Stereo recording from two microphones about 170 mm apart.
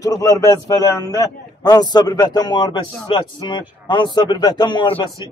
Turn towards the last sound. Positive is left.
turn(degrees=30)  # may be behind; listen again after turning